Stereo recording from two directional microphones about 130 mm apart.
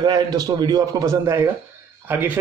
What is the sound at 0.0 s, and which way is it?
A man's voice, 30° right (ahead or behind).